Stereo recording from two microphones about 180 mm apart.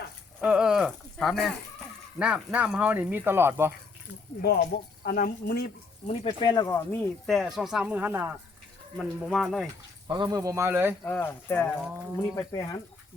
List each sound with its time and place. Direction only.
0.3 s speech: 5° right (ahead or behind)
4.4 s speech: 60° left (ahead or behind)
6.1 s speech: 25° left (ahead or behind); by 9.6 s centre (ahead or behind)
10.1 s speech: 25° right (ahead or behind)
11.0 s speech: 10° left (ahead or behind)